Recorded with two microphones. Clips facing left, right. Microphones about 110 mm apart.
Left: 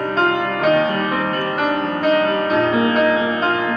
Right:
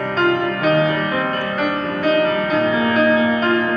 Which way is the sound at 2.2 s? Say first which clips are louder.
Even; 45° left (ahead or behind).